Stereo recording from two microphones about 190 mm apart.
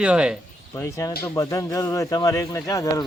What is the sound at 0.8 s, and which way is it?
A man's voice, 15° left (ahead or behind).